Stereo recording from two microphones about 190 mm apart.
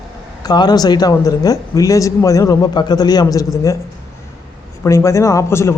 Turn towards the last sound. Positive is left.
turn(degrees=15)  # may be behind; listen again after turning